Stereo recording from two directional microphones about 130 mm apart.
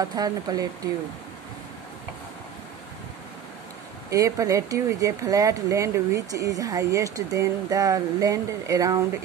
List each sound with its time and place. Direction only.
0.0 s speech: 30° right (ahead or behind)
4.1 s speech: 25° right (ahead or behind)